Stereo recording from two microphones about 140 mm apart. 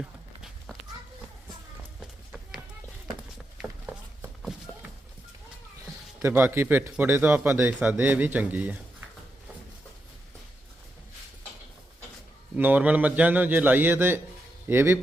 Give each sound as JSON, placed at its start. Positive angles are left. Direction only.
{"t": 0.0, "sound": "run", "side_deg": -5}
{"t": 2.0, "sound": "run", "side_deg": -5}
{"t": 3.6, "sound": "a sound", "side_deg": -10}
{"t": 6.2, "sound": "speech", "side_deg": -15}
{"t": 12.5, "sound": "speech", "side_deg": -10}